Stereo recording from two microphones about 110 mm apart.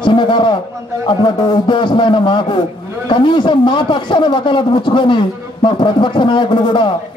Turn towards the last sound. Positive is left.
turn(degrees=45)  # may be behind; listen again after turning